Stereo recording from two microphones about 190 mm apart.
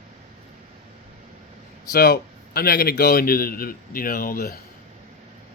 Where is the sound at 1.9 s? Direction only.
55° left (ahead or behind).